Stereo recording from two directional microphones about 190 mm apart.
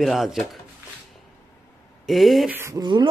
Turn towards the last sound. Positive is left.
turn(degrees=-20)  # may be behind; listen again after turning